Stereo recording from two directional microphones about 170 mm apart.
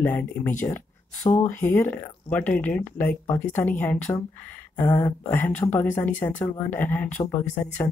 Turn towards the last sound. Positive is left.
turn(degrees=10)  # may be behind; listen again after turning